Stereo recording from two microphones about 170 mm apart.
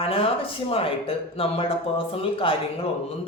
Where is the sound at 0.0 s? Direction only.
35° left (ahead or behind).